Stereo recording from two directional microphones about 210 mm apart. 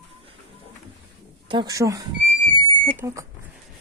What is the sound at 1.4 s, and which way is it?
Speech, 20° right (ahead or behind).